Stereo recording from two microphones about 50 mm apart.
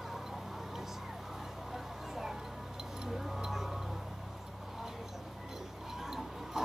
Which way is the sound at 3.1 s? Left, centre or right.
Centre.